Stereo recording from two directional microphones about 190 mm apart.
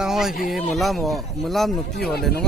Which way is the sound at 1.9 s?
55° left (ahead or behind).